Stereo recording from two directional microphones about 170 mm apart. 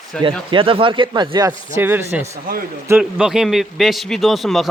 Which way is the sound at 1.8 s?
10° right (ahead or behind).